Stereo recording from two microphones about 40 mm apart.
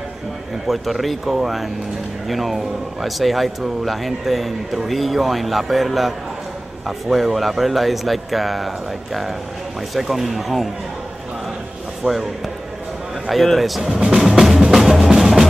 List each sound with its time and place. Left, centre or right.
0.7 s speech: centre
12.0 s speech: right
13.3 s speech: centre
13.8 s music: centre